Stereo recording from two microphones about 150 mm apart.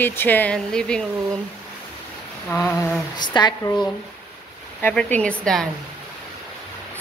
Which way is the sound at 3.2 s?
30° left (ahead or behind).